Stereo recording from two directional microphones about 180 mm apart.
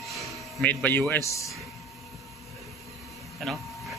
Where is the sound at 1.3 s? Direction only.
15° left (ahead or behind).